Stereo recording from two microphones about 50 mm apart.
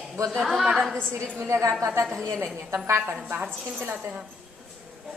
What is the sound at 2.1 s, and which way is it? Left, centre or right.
Speech, right.